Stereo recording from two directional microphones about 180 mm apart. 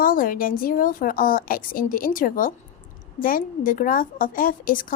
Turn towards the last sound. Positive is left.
turn(degrees=50)  # may be behind; listen again after turning